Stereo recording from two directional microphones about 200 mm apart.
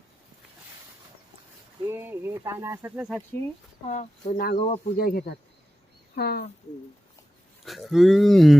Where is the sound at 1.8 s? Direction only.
10° right (ahead or behind).